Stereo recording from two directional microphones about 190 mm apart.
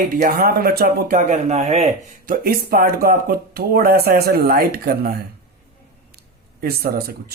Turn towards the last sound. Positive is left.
turn(degrees=-55)  # may be behind; listen again after turning